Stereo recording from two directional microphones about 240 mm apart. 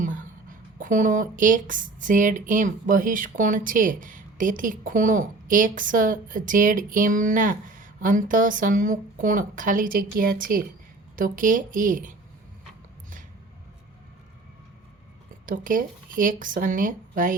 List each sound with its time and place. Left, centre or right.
0.0 s a sound: right
0.8 s speech: right
15.4 s speech: right